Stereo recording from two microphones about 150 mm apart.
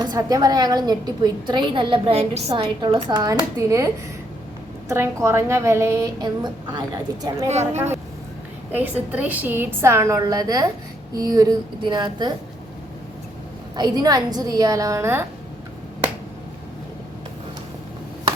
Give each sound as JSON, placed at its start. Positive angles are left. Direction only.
{"t": 0.0, "sound": "a woman's voice", "side_deg": -25}
{"t": 3.1, "sound": "a woman's voice", "side_deg": -25}
{"t": 7.4, "sound": "a woman's voice", "side_deg": -50}
{"t": 8.7, "sound": "a woman's voice", "side_deg": -10}
{"t": 13.7, "sound": "a woman's voice", "side_deg": -25}